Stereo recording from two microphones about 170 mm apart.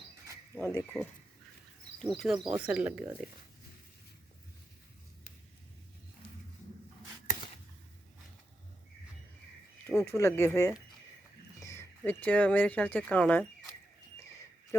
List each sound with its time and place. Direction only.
0.5 s speech: 15° left (ahead or behind)
2.0 s speech: centre (ahead or behind)
9.8 s speech: 15° left (ahead or behind)